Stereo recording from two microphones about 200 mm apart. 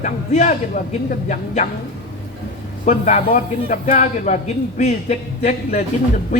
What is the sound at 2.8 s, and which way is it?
A man's voice, 35° left (ahead or behind).